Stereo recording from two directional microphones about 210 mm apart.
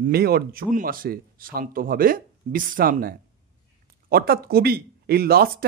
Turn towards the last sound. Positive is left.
turn(degrees=-45)  # may be behind; listen again after turning